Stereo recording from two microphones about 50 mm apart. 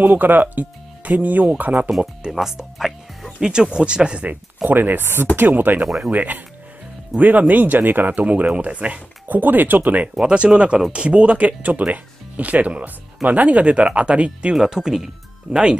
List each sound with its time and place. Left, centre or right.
0.0 s speech: right
2.3 s speech: centre
4.6 s speech: right
10.2 s speech: right
14.5 s speech: centre